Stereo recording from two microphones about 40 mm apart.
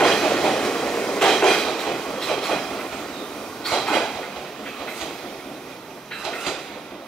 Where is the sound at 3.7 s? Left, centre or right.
Centre.